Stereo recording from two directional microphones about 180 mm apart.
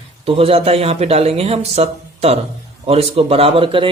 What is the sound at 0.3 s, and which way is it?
Speech, 30° right (ahead or behind).